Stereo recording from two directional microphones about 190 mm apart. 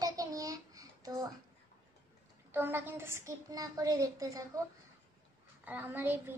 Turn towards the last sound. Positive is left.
turn(degrees=-10)  # may be behind; listen again after turning